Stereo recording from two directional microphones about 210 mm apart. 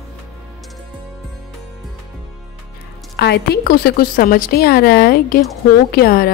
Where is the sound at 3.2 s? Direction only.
50° left (ahead or behind).